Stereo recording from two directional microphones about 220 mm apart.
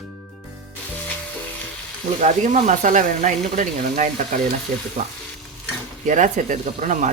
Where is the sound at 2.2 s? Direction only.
30° right (ahead or behind).